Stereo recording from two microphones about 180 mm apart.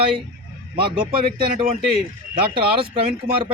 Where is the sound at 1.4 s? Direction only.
35° right (ahead or behind).